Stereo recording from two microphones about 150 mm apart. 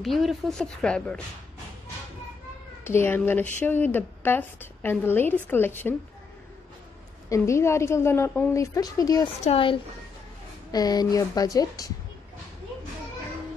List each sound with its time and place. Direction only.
0.0 s speech: centre (ahead or behind)
2.8 s speech: 15° left (ahead or behind)
7.2 s a woman's voice: 20° left (ahead or behind)
9.4 s a woman's voice: 40° left (ahead or behind)
10.7 s a woman's voice: 25° left (ahead or behind)